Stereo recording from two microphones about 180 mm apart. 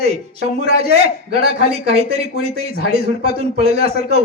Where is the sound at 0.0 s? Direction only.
40° right (ahead or behind).